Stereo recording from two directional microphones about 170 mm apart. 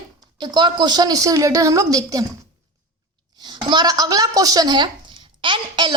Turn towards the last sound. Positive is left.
turn(degrees=-30)  # may be behind; listen again after turning